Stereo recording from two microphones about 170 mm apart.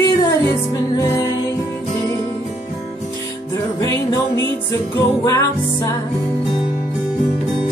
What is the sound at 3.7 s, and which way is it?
Music, 20° left (ahead or behind).